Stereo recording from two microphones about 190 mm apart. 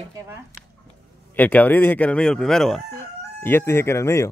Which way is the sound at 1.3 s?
10° left (ahead or behind).